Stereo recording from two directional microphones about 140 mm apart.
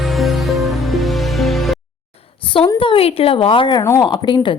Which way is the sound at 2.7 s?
40° left (ahead or behind).